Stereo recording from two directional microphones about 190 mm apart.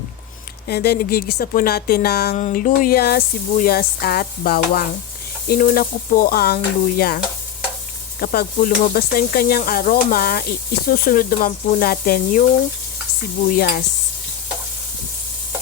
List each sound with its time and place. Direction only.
0.7 s speech: 55° left (ahead or behind)
2.3 s speech: 45° left (ahead or behind)
8.2 s speech: 50° left (ahead or behind)
13.6 s speech: 55° left (ahead or behind)